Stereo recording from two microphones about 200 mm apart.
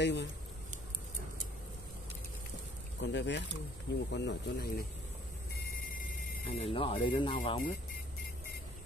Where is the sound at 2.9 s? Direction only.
65° left (ahead or behind).